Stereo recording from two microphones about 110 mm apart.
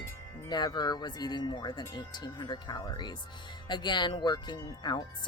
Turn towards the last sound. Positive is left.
turn(degrees=40)  # may be behind; listen again after turning